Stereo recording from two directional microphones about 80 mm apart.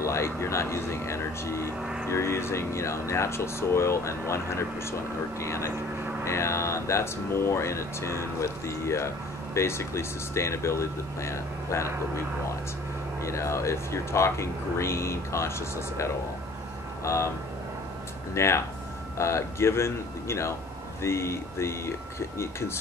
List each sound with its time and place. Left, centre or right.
0.0 s speech: left
1.8 s speech: centre
2.0 s speech: left
13.2 s speech: left
18.3 s speech: left